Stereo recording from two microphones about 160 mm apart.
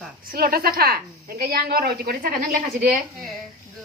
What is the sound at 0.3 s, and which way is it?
A woman's voice, 65° right (ahead or behind).